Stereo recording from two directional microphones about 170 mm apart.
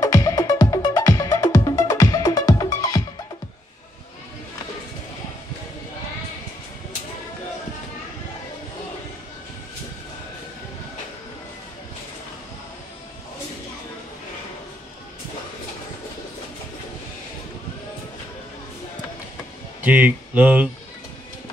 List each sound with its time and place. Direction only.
0.0 s music: 20° left (ahead or behind)
19.8 s speech: 10° right (ahead or behind)